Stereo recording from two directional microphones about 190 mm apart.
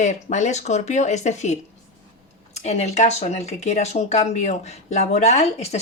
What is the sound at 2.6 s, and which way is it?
Speech, 35° left (ahead or behind).